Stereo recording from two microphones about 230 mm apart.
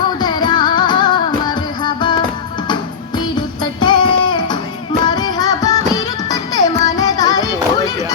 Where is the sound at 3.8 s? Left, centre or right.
Centre.